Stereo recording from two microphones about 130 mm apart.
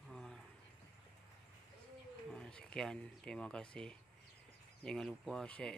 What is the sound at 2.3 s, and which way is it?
Speech, 5° left (ahead or behind).